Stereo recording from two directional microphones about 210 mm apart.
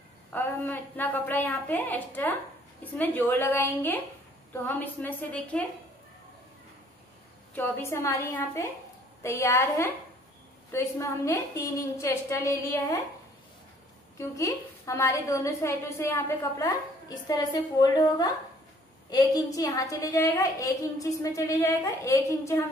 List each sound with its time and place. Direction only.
0.3 s a woman's voice: 10° left (ahead or behind)
7.5 s a woman's voice: 10° left (ahead or behind)
14.1 s a woman's voice: 15° left (ahead or behind)